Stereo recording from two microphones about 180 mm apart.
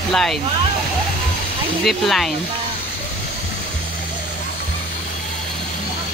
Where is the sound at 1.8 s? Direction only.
Centre (ahead or behind).